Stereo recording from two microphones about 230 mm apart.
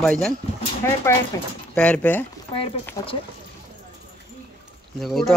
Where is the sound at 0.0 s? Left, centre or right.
Centre.